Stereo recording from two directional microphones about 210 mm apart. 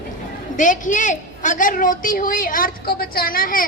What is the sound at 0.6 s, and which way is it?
A woman's voice, 40° left (ahead or behind).